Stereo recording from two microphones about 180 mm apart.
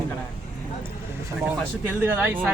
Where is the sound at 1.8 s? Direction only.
10° right (ahead or behind).